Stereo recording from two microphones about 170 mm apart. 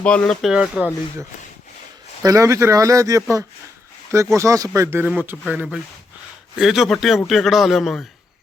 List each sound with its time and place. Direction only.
0.0 s speech: 5° left (ahead or behind)
2.2 s a man's voice: 20° right (ahead or behind); by 8.0 s centre (ahead or behind)